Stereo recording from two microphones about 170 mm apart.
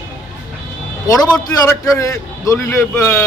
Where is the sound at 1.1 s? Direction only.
20° left (ahead or behind).